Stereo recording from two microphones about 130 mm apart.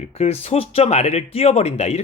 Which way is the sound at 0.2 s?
50° left (ahead or behind).